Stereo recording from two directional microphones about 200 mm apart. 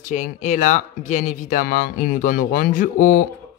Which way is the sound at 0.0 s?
35° left (ahead or behind).